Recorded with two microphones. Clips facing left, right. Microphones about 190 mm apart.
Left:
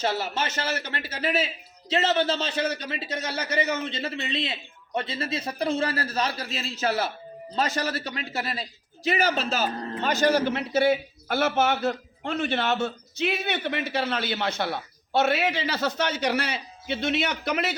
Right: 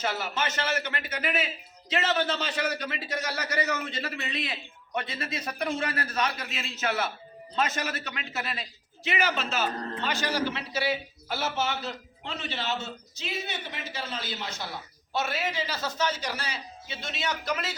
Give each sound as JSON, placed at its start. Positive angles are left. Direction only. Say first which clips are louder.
{"t": 0.0, "sound": "a man's voice", "louder": "left 3 dB", "side_deg": 30}